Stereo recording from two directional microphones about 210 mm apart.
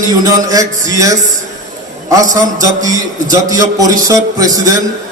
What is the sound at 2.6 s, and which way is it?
Mantra, 15° right (ahead or behind).